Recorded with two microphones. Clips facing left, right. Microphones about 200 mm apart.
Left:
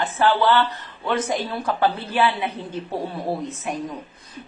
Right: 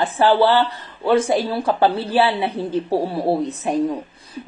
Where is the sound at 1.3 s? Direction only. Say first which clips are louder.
Right 6 dB; 30° right (ahead or behind).